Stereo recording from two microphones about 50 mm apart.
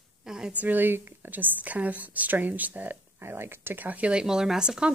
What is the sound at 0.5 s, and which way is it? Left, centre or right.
A woman's voice, right.